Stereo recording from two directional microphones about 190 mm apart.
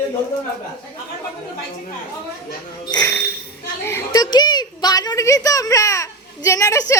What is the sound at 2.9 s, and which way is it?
A child's voice, 15° left (ahead or behind).